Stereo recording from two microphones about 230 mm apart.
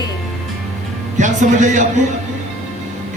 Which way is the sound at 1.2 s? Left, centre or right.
Right.